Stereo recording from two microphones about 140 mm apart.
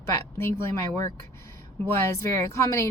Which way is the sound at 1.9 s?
20° left (ahead or behind).